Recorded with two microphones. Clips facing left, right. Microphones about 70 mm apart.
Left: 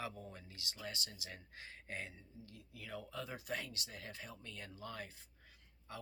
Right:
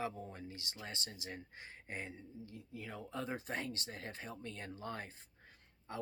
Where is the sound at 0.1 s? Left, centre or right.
Right.